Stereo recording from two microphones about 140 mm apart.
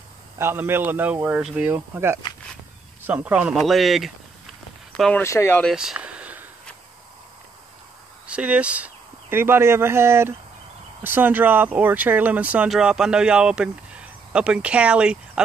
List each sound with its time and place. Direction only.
0.4 s speech: 15° right (ahead or behind)
3.5 s speech: centre (ahead or behind)
5.1 s speech: 20° left (ahead or behind)
5.6 s a sound: centre (ahead or behind)
8.3 s speech: 10° right (ahead or behind)